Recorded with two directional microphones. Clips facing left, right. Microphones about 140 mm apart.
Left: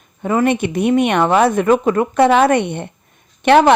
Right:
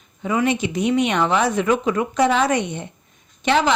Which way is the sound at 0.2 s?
50° left (ahead or behind).